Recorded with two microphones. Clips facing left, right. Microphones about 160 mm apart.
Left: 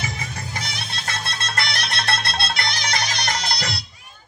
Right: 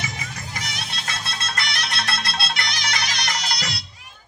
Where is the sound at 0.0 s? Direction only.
30° left (ahead or behind).